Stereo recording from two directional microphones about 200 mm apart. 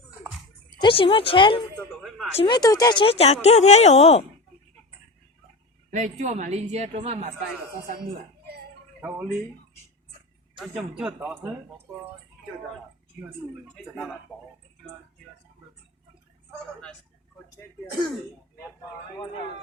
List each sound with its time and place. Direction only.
0.8 s speech: 25° left (ahead or behind)
2.0 s a sound: centre (ahead or behind)
2.3 s speech: 25° left (ahead or behind)
5.9 s a woman's voice: 40° right (ahead or behind)
9.0 s speech: 10° right (ahead or behind)
10.6 s speech: 5° right (ahead or behind)
13.7 s a man's voice: 5° left (ahead or behind)
19.1 s speech: 20° left (ahead or behind)